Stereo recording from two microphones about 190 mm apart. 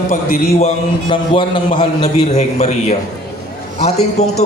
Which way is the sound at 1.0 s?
25° left (ahead or behind).